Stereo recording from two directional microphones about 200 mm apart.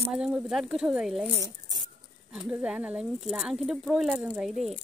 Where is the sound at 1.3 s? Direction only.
20° right (ahead or behind).